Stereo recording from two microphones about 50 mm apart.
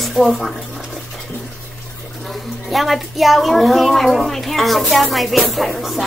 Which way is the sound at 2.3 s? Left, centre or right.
Centre.